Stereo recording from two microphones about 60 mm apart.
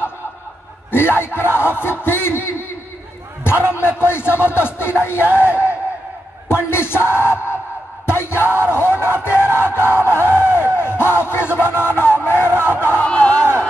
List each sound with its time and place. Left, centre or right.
0.9 s speech: left
10.7 s crowd: left
12.8 s a sound: left